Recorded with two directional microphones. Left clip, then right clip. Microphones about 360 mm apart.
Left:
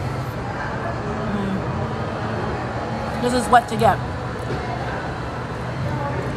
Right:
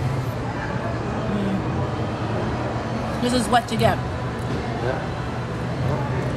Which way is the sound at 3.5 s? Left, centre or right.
Centre.